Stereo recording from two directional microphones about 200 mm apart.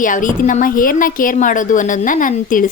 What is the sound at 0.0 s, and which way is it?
A woman's voice, 40° left (ahead or behind).